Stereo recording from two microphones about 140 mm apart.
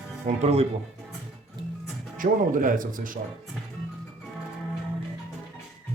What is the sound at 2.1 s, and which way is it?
Speech, 75° right (ahead or behind).